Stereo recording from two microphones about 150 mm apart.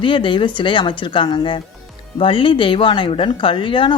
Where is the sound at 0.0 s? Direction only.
35° left (ahead or behind).